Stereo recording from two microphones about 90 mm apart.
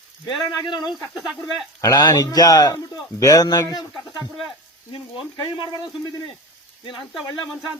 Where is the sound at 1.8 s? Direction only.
45° left (ahead or behind).